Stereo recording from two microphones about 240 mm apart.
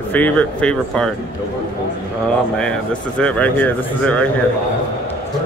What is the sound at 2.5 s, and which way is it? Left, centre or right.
Speech, centre.